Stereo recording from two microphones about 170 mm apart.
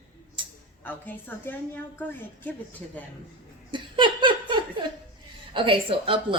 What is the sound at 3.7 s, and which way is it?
Laughter, 30° right (ahead or behind).